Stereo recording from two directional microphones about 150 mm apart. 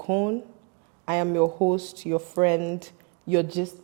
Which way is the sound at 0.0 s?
20° right (ahead or behind).